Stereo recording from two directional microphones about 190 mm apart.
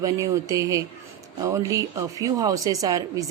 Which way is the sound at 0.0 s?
15° right (ahead or behind).